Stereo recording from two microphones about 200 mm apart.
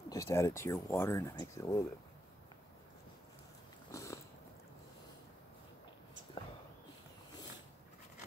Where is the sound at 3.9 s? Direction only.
15° left (ahead or behind).